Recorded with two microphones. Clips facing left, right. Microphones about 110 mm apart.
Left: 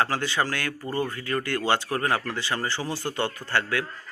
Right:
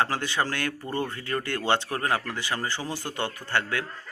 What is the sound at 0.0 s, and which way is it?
Speech, 20° right (ahead or behind).